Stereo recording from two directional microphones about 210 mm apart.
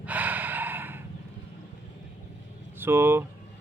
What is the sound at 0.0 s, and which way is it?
Gasp, 5° right (ahead or behind).